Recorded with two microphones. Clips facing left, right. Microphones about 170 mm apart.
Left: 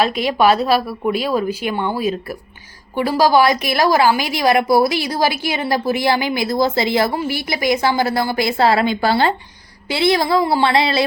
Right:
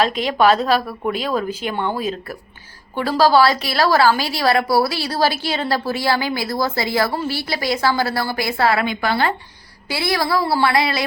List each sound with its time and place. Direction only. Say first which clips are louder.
0.0 s a woman's voice: left 1 dB; 10° left (ahead or behind)